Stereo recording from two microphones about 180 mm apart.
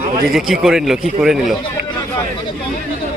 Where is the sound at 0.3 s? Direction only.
Centre (ahead or behind).